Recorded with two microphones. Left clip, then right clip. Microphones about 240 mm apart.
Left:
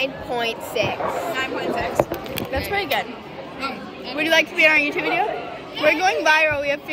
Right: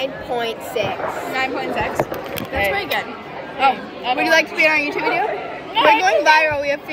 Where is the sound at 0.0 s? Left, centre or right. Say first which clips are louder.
Right 1 dB; centre.